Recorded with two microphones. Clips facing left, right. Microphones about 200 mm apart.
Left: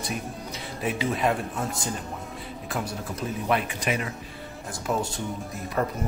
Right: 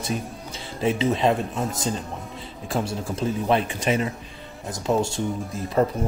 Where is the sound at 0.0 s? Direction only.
30° right (ahead or behind).